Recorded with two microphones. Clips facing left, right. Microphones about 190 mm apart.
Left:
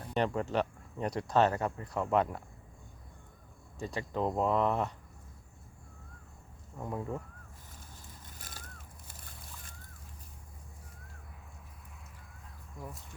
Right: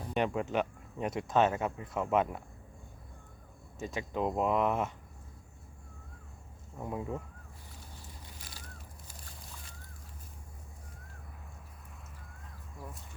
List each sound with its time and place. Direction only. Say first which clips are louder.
0.0 s speech: even; 10° right (ahead or behind)
3.8 s speech: even; 15° right (ahead or behind)
6.7 s speech: even; 5° right (ahead or behind)
8.3 s a sound: even; 50° left (ahead or behind)